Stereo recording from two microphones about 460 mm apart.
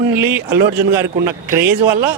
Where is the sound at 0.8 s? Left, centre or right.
Right.